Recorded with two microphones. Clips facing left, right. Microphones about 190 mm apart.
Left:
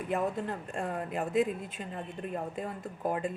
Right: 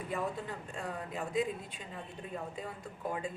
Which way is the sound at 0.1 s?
60° left (ahead or behind).